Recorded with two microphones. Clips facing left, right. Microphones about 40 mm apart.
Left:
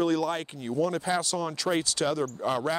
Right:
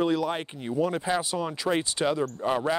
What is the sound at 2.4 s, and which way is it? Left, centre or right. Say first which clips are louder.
Speech: right 2 dB; centre.